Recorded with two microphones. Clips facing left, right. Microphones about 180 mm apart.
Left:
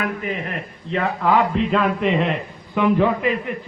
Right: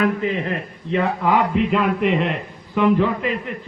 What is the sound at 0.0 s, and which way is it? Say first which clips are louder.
Speech: right 5 dB; 25° right (ahead or behind).